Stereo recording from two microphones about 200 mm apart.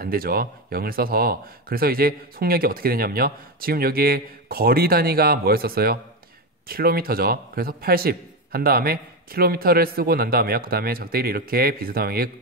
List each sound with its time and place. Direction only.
0.0 s speech: 50° right (ahead or behind)